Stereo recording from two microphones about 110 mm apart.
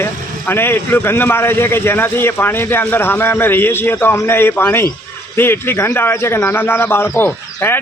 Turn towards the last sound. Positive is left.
turn(degrees=20)  # may be behind; listen again after turning